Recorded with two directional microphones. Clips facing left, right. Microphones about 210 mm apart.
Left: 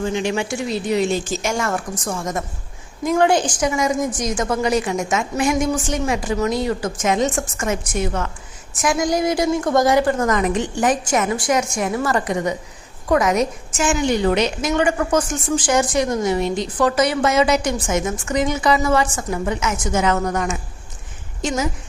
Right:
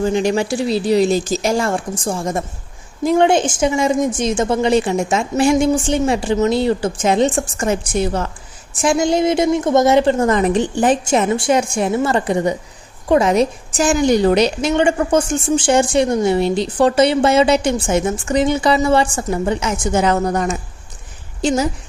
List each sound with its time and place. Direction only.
0.0 s a woman's voice: 40° right (ahead or behind)